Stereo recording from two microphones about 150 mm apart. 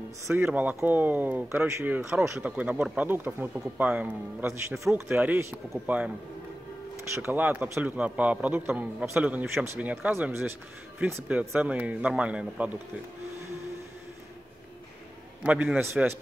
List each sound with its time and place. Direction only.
0.3 s a man's voice: 15° right (ahead or behind)
7.2 s a man's voice: 15° right (ahead or behind)
15.4 s a man's voice: 10° right (ahead or behind)